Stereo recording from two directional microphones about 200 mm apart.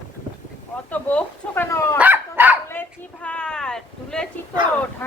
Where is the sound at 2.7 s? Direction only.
10° left (ahead or behind).